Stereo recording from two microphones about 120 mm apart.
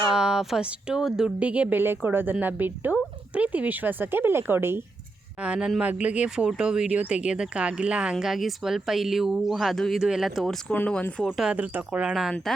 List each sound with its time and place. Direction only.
0.1 s speech: 5° right (ahead or behind)
5.4 s speech: 5° right (ahead or behind)
10.7 s speech: 10° left (ahead or behind)
11.3 s speech: 5° right (ahead or behind)